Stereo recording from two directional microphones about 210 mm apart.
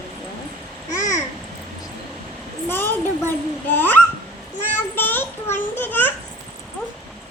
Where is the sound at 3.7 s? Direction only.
10° left (ahead or behind).